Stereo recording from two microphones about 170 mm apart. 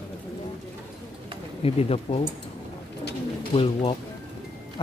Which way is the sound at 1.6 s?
35° left (ahead or behind).